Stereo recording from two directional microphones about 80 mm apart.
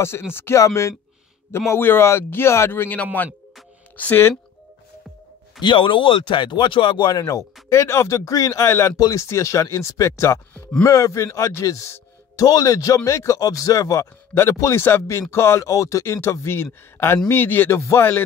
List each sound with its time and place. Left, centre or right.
0.3 s a man's voice: left
5.6 s speech: left
7.7 s speech: left
14.8 s a man's voice: left
17.7 s speech: left